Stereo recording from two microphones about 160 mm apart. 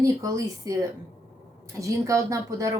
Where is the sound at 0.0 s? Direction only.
20° right (ahead or behind).